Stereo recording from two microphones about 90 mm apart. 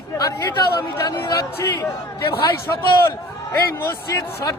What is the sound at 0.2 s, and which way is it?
A man's voice, 45° left (ahead or behind).